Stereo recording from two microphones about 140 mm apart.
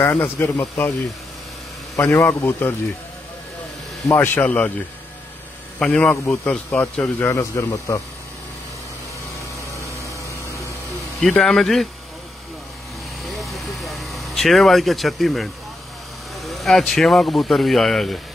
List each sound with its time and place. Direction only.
0.0 s speech: 15° left (ahead or behind)
2.0 s speech: 15° left (ahead or behind)
4.1 s speech: 15° left (ahead or behind)
5.8 s speech: 10° left (ahead or behind)
10.0 s a sound: 20° left (ahead or behind)
11.1 s speech: 5° left (ahead or behind)
13.2 s vehicle: centre (ahead or behind)
16.3 s speech: centre (ahead or behind)